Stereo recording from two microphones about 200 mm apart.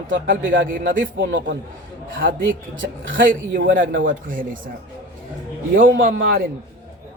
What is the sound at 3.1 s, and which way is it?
A man's voice, 45° right (ahead or behind).